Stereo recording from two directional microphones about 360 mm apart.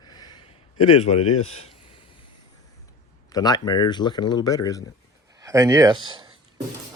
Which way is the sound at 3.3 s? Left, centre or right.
Centre.